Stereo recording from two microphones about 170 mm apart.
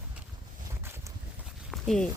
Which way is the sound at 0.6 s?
20° right (ahead or behind).